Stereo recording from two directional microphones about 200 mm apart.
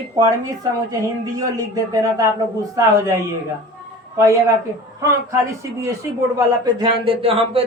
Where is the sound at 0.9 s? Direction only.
15° right (ahead or behind).